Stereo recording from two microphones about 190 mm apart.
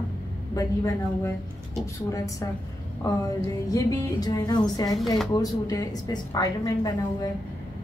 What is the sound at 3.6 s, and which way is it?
A woman's voice, 20° left (ahead or behind).